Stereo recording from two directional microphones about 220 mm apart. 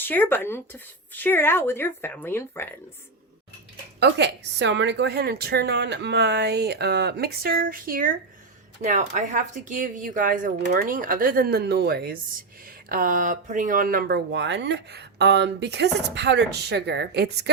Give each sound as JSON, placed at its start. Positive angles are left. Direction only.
{"t": 0.0, "sound": "speech", "side_deg": 10}
{"t": 4.0, "sound": "speech", "side_deg": -50}